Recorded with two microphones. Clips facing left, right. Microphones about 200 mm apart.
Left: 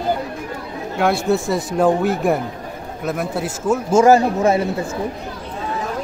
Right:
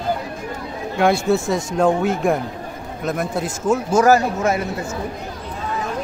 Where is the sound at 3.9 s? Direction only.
25° left (ahead or behind).